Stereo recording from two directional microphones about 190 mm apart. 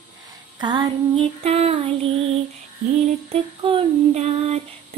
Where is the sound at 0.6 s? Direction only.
20° right (ahead or behind).